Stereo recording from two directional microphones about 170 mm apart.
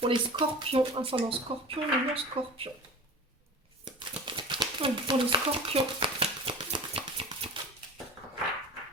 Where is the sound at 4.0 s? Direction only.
30° right (ahead or behind).